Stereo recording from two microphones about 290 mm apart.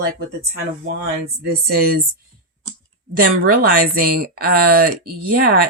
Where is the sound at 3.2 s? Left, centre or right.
Right.